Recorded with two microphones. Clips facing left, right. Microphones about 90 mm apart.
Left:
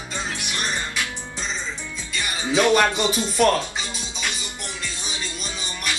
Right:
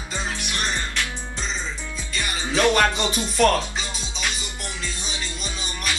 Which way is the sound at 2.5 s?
10° left (ahead or behind).